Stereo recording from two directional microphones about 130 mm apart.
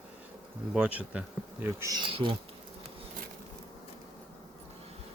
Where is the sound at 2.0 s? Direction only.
40° right (ahead or behind).